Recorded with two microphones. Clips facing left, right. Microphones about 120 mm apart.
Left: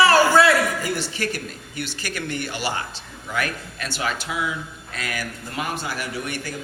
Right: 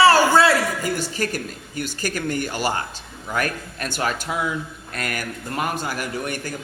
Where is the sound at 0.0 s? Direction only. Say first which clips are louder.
Right 1 dB; 30° right (ahead or behind).